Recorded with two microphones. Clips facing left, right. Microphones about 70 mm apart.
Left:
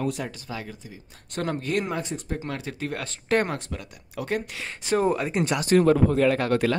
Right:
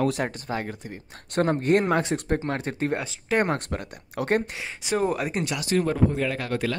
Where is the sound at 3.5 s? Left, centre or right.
Right.